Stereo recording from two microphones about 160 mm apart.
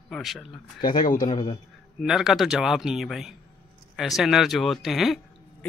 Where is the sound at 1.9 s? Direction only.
Centre (ahead or behind).